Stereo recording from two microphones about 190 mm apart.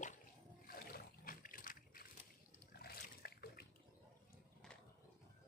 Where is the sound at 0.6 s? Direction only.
50° left (ahead or behind).